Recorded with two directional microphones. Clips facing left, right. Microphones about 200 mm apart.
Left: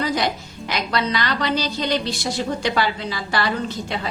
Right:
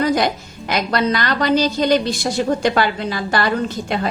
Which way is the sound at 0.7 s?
50° right (ahead or behind).